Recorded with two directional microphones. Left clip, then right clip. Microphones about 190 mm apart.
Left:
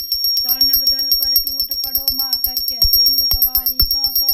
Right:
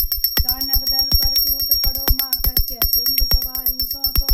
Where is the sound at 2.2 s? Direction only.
25° right (ahead or behind).